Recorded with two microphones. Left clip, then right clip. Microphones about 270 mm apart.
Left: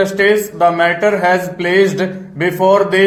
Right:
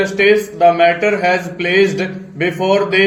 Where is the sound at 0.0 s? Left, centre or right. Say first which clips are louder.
Even; left.